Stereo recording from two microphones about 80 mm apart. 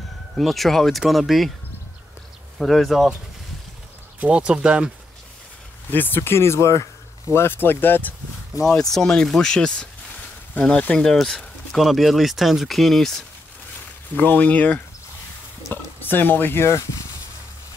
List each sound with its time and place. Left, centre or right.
0.4 s speech: centre
2.6 s speech: centre
4.2 s speech: centre
5.9 s speech: left
7.3 s speech: left
8.9 s speech: centre
14.1 s speech: left